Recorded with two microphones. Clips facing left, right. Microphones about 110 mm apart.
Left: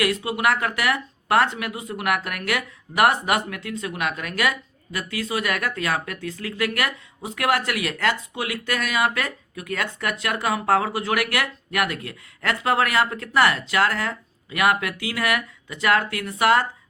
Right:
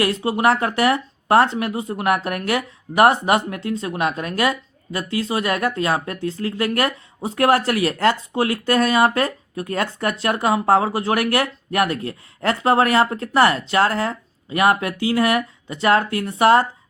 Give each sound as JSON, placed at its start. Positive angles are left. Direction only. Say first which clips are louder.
{"t": 0.0, "sound": "speech", "louder": "right 4 dB", "side_deg": -30}